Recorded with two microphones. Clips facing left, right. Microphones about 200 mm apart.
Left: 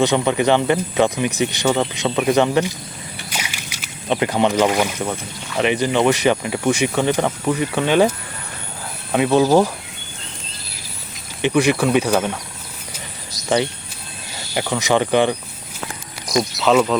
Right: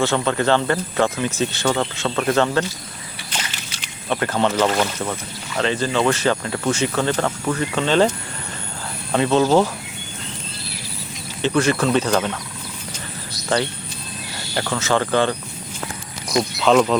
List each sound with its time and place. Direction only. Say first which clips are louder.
0.0 s speech: left 3 dB; 15° left (ahead or behind)
3.2 s a sound: even; 10° left (ahead or behind)
5.5 s speech: left 3 dB; 15° left (ahead or behind)
9.1 s speech: left 2 dB; 10° left (ahead or behind)
11.4 s speech: left 2 dB; 15° left (ahead or behind)
14.5 s speech: left 2 dB; 15° left (ahead or behind)
16.4 s speech: even; 5° left (ahead or behind)